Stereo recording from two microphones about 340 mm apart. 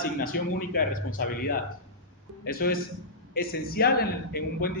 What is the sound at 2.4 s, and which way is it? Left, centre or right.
A man's voice, left.